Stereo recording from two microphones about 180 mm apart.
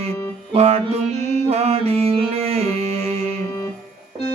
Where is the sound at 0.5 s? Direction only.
35° right (ahead or behind).